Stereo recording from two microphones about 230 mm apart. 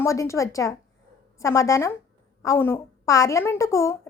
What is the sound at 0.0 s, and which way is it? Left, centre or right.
A woman's voice, centre.